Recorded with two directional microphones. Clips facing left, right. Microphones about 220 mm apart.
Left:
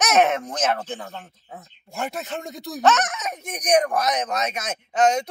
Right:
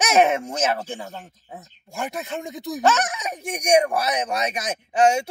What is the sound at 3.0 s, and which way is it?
Speech, 15° right (ahead or behind).